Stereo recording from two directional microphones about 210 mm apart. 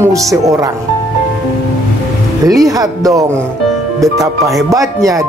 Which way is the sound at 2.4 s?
15° right (ahead or behind).